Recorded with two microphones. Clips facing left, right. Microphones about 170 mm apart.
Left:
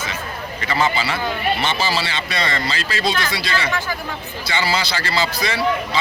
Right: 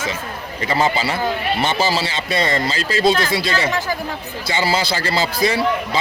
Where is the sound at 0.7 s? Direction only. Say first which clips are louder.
Right 2 dB; 40° right (ahead or behind).